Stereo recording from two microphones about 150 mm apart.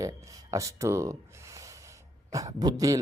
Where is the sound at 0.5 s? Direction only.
20° right (ahead or behind).